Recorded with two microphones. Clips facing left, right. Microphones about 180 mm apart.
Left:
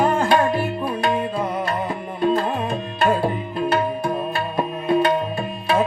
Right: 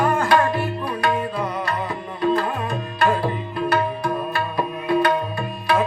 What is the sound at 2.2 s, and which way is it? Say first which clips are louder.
Tabla: left 1 dB; 25° left (ahead or behind).